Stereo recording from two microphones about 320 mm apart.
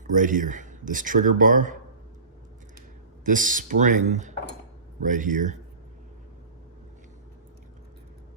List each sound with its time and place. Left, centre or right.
0.1 s speech: right
3.2 s speech: right